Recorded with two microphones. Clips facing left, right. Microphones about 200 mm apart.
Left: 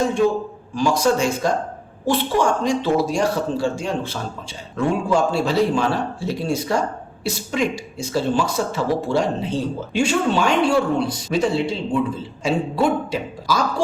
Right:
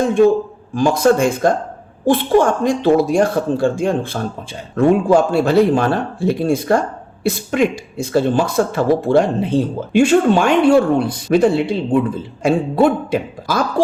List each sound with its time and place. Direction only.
0.7 s speech: 50° right (ahead or behind)